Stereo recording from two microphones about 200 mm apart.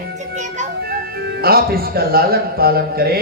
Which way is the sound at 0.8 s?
50° right (ahead or behind).